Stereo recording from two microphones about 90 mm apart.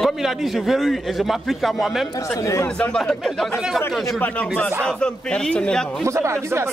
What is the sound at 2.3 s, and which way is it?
Speech, 35° left (ahead or behind).